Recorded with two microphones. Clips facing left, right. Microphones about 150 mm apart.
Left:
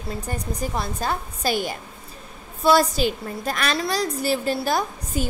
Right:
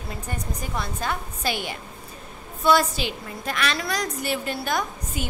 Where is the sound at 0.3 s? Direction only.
35° left (ahead or behind).